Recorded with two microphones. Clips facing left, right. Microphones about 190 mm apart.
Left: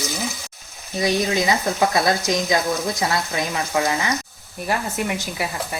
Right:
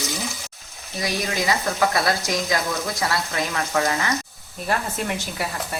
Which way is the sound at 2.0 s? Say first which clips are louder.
Left 3 dB; 20° left (ahead or behind).